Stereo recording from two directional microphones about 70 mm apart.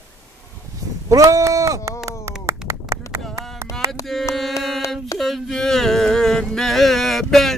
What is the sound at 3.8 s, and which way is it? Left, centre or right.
Carnatic music, right.